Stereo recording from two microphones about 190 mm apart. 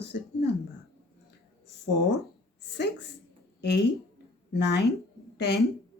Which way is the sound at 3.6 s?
60° left (ahead or behind).